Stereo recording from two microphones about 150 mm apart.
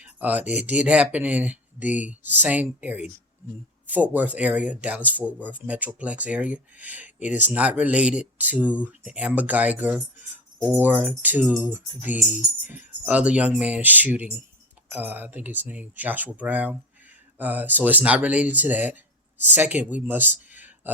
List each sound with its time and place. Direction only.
0.0 s speech: 10° right (ahead or behind)